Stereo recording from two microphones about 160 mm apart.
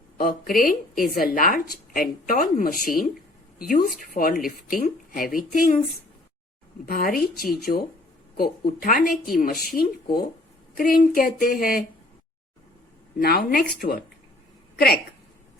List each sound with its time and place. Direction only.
0.2 s a woman's voice: 65° left (ahead or behind)
6.8 s a woman's voice: 65° left (ahead or behind)
13.1 s speech: 70° left (ahead or behind)